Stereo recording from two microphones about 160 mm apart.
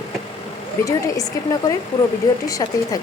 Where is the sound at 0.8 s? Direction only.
20° left (ahead or behind).